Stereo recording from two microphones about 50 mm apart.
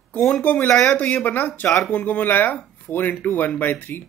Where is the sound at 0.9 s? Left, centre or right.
Left.